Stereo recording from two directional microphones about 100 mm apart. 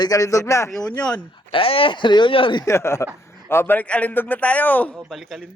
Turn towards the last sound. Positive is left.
turn(degrees=0)  # may be behind; listen again after turning